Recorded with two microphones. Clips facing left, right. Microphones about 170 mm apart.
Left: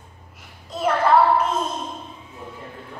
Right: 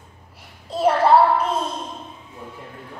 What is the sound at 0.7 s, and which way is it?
Child singing, 30° right (ahead or behind).